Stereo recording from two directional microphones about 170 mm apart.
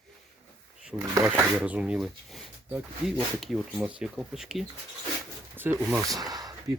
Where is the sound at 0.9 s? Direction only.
15° right (ahead or behind).